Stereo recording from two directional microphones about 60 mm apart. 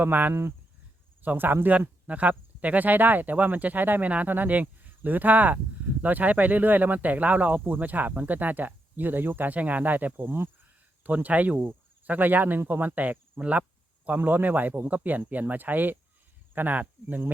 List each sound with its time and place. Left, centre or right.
0.0 s speech: right